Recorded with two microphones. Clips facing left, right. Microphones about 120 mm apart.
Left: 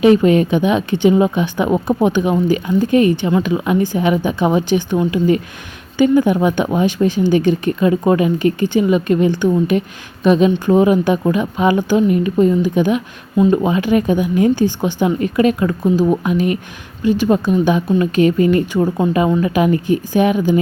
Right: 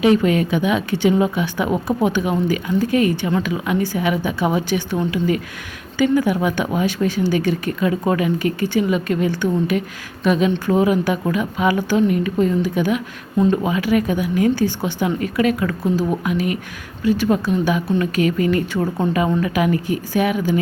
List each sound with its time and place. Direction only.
0.0 s a woman's voice: 25° left (ahead or behind)
19.0 s speech: 10° left (ahead or behind)
19.4 s a woman's voice: 25° left (ahead or behind)